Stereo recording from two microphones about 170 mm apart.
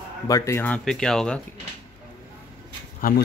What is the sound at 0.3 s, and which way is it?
Speech, 15° left (ahead or behind).